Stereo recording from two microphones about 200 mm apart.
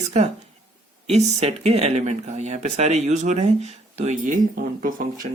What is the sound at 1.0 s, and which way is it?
Speech, 30° right (ahead or behind).